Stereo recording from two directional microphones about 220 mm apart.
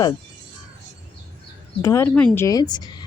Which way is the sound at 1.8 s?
15° left (ahead or behind).